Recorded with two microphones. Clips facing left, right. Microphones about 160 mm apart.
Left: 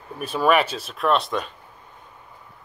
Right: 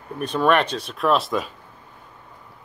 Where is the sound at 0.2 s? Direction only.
5° left (ahead or behind).